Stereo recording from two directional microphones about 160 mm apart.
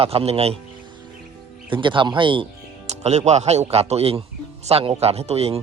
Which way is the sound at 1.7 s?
30° right (ahead or behind).